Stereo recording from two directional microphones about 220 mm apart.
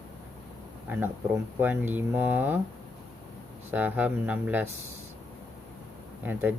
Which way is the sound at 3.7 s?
5° right (ahead or behind).